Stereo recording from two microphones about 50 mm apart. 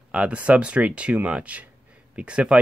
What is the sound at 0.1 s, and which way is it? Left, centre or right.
Speech, right.